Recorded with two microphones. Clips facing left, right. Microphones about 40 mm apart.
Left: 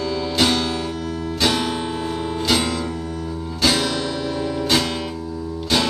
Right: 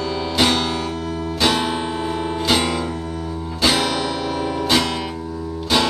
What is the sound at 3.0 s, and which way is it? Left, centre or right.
Music, centre.